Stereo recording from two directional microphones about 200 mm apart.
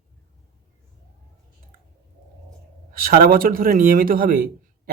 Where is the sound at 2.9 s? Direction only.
45° right (ahead or behind).